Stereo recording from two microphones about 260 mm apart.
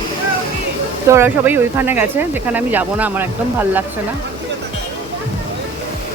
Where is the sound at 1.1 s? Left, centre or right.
Centre.